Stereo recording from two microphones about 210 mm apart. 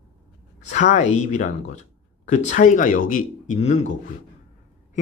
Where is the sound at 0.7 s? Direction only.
35° left (ahead or behind).